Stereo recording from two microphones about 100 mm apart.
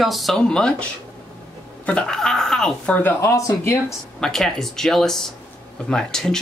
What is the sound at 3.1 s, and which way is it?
Speech, 30° left (ahead or behind).